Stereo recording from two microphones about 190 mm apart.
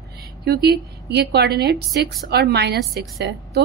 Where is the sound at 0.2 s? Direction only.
55° right (ahead or behind).